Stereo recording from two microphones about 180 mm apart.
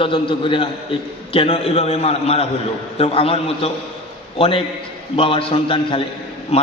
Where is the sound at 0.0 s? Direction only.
30° left (ahead or behind).